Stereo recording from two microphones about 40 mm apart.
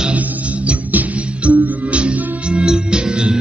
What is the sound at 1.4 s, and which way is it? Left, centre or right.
Music, right.